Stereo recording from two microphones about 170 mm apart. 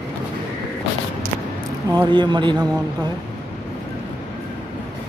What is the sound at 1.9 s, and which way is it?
Speech, 25° right (ahead or behind).